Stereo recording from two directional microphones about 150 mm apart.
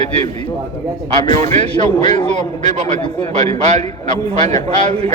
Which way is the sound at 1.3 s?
50° right (ahead or behind).